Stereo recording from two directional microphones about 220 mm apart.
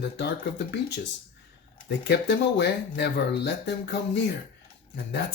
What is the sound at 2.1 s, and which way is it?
Speech, 50° left (ahead or behind).